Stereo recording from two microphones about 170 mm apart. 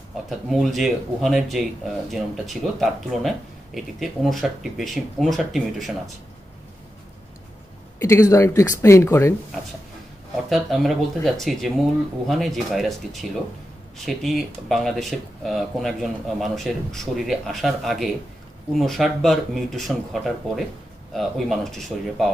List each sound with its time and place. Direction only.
0.3 s speech: centre (ahead or behind)
8.0 s speech: 20° left (ahead or behind)
10.5 s speech: centre (ahead or behind)